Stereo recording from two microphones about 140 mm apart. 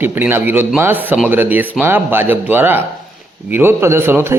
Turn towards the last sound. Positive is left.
turn(degrees=-15)  # may be behind; listen again after turning